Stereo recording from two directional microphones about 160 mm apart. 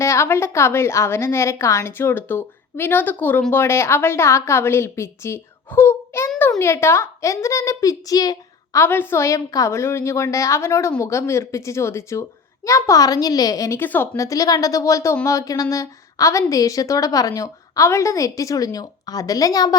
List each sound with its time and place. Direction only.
0.0 s a woman's voice: 15° left (ahead or behind)